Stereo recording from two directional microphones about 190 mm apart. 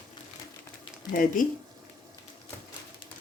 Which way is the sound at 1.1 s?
45° left (ahead or behind).